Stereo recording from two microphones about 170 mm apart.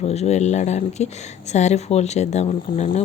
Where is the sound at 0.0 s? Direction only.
40° left (ahead or behind).